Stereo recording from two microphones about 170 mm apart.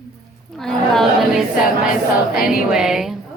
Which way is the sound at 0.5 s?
Centre (ahead or behind).